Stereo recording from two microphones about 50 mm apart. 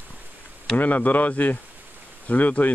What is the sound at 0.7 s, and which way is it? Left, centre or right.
Speech, left.